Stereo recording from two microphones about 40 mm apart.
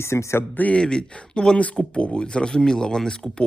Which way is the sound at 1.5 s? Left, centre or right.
Left.